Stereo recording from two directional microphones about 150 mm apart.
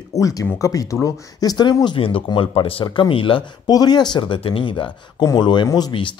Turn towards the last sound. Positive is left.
turn(degrees=30)  # may be behind; listen again after turning